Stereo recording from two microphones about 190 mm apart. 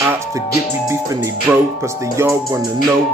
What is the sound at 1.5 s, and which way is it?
Music, 5° right (ahead or behind).